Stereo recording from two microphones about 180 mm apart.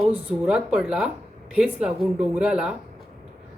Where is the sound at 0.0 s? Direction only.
5° right (ahead or behind).